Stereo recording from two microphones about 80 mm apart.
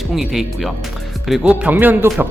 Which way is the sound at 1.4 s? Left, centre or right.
Centre.